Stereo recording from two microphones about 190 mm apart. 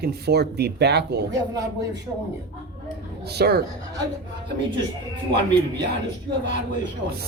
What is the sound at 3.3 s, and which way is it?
Speech, 60° right (ahead or behind).